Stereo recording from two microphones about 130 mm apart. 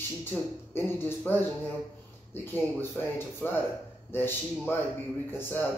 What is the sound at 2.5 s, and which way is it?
Speech, 15° left (ahead or behind).